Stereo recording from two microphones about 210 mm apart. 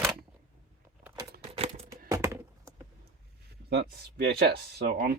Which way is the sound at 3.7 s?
50° right (ahead or behind).